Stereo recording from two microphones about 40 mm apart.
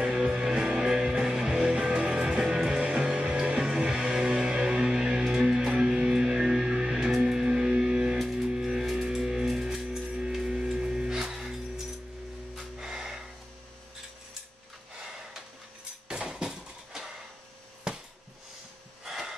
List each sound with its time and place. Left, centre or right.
0.0 s music: centre
1.5 s music: right
2.8 s music: right
12.8 s music: centre
16.1 s a sound: centre
19.0 s breathing: centre